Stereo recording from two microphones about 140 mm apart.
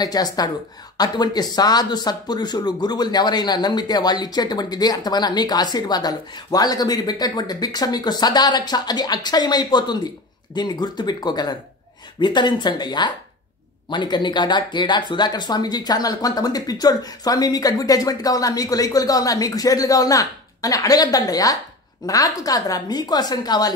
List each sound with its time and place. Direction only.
0.0 s speech: 30° left (ahead or behind)